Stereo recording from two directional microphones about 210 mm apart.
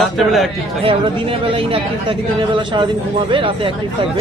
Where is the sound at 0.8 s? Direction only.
25° right (ahead or behind).